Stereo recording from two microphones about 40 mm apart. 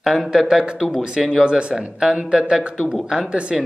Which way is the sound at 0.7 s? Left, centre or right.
Centre.